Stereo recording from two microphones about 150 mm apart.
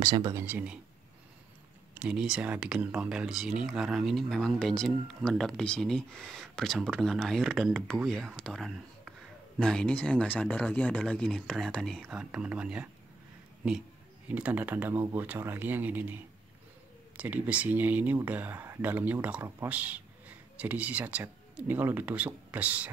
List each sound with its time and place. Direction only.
0.0 s speech: 25° right (ahead or behind); by 0.7 s 10° right (ahead or behind)
2.0 s speech: 5° right (ahead or behind)
17.2 s speech: 10° right (ahead or behind)